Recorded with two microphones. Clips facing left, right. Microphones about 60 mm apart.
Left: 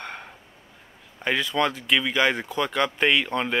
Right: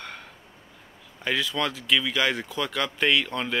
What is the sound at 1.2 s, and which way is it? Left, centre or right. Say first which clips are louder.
Speech: left 3 dB; left.